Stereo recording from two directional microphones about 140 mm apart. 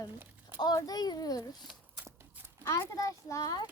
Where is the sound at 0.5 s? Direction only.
30° left (ahead or behind).